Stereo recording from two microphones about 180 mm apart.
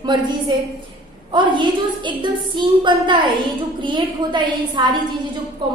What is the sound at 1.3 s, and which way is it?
A woman's voice, 25° right (ahead or behind).